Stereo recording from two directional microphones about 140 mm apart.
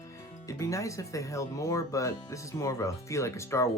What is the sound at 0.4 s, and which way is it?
Speech, 20° left (ahead or behind).